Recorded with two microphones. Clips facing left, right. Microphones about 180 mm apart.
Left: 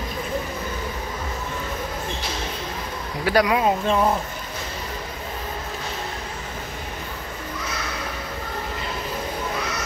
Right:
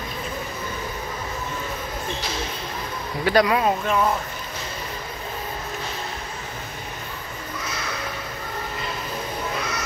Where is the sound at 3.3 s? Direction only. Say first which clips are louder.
Even; 10° left (ahead or behind).